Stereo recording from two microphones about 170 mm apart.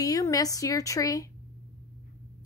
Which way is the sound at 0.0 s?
20° left (ahead or behind).